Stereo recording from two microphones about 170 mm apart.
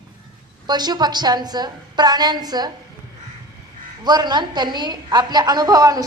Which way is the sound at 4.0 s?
25° right (ahead or behind).